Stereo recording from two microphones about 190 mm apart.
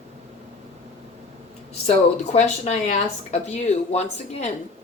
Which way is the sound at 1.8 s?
35° left (ahead or behind).